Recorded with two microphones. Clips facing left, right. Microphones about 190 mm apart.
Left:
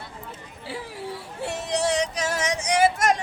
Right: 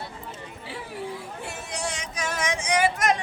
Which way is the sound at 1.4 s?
35° left (ahead or behind).